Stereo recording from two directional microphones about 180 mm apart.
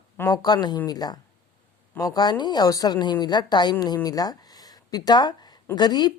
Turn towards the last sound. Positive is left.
turn(degrees=25)  # may be behind; listen again after turning